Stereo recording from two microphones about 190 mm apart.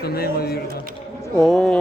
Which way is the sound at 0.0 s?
55° left (ahead or behind).